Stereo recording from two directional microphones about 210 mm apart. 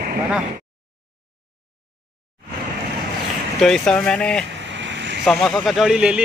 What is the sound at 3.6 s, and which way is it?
Speech, 5° left (ahead or behind).